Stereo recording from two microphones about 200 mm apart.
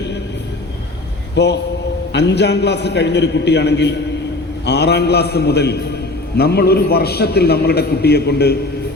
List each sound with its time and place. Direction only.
1.4 s a man's voice: 60° left (ahead or behind)